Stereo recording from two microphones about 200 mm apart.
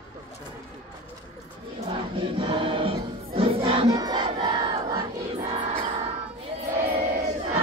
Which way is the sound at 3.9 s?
20° right (ahead or behind).